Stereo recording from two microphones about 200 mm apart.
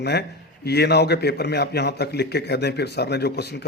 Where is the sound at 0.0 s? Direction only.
55° left (ahead or behind).